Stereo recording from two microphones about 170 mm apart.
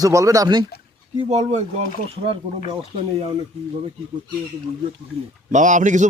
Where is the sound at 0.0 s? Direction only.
20° right (ahead or behind).